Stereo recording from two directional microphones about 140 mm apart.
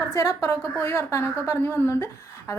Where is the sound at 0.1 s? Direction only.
25° left (ahead or behind).